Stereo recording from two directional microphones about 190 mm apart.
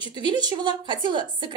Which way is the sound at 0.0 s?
25° right (ahead or behind).